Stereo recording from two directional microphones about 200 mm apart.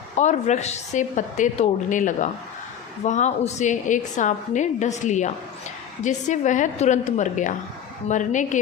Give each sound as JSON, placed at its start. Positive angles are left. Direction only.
{"t": 0.2, "sound": "a woman's voice", "side_deg": 35}